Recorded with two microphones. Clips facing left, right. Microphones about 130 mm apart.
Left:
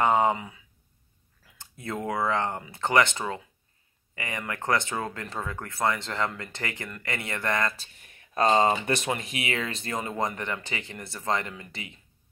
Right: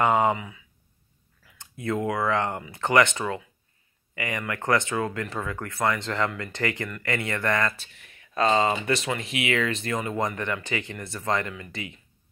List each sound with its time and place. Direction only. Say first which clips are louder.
0.1 s speech: right 1 dB; 30° left (ahead or behind)
1.6 s a sound: right 6 dB; 35° left (ahead or behind)
2.0 s speech: even; 25° left (ahead or behind)